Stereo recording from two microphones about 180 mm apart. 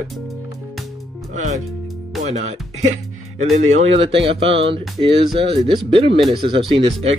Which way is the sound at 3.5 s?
35° right (ahead or behind).